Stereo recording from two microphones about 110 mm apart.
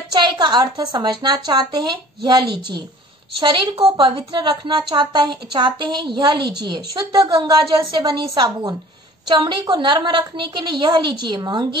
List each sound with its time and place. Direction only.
0.1 s a woman's voice: 40° right (ahead or behind)